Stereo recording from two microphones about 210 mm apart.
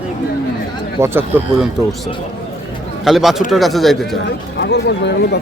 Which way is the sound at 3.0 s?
Centre (ahead or behind).